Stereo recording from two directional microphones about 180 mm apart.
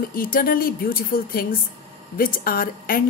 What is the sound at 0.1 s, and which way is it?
A woman's voice, 55° left (ahead or behind).